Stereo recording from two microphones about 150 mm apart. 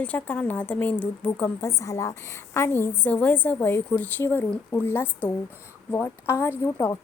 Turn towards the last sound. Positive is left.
turn(degrees=20)  # may be behind; listen again after turning